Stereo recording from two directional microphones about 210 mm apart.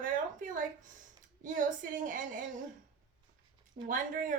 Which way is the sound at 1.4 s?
40° right (ahead or behind).